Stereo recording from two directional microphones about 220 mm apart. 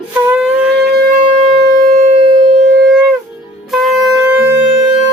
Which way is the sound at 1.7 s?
30° right (ahead or behind).